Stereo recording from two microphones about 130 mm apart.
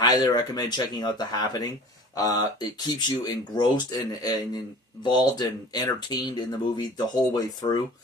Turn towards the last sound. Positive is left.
turn(degrees=30)  # may be behind; listen again after turning